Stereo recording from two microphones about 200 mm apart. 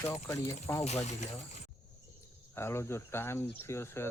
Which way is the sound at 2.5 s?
15° left (ahead or behind).